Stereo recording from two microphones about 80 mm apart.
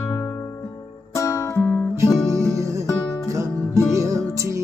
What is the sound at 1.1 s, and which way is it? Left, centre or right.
Music, left.